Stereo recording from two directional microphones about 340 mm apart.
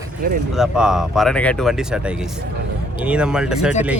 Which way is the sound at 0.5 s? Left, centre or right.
Centre.